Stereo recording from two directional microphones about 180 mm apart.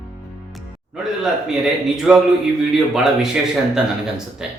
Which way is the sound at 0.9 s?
Centre (ahead or behind).